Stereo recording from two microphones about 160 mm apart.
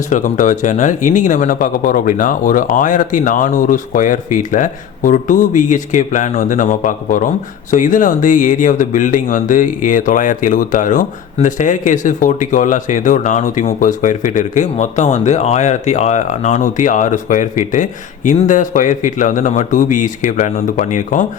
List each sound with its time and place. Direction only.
0.1 s speech: 50° left (ahead or behind)